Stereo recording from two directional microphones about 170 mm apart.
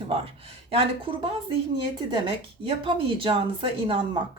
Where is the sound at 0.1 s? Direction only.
35° right (ahead or behind).